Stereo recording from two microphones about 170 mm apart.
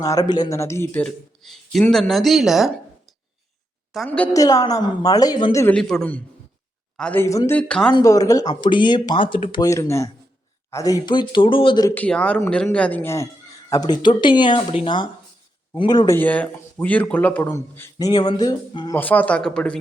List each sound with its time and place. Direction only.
0.0 s speech: 20° left (ahead or behind); by 2.7 s centre (ahead or behind)
3.9 s speech: 5° left (ahead or behind)
4.4 s speech: 20° left (ahead or behind)
5.7 s a man's voice: 5° left (ahead or behind)
7.9 s speech: 20° left (ahead or behind)
11.9 s a man's voice: 5° left (ahead or behind); by 16.1 s 25° left (ahead or behind)
16.1 s a man's voice: 10° left (ahead or behind)
17.9 s speech: 25° left (ahead or behind)
18.9 s a man's voice: 10° left (ahead or behind)